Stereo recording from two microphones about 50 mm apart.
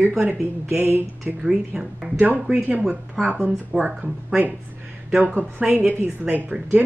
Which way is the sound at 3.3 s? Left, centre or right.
Centre.